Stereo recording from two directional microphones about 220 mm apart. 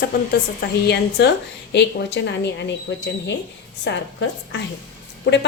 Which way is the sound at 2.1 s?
50° left (ahead or behind).